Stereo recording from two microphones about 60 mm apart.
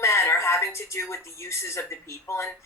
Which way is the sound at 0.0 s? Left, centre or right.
Left.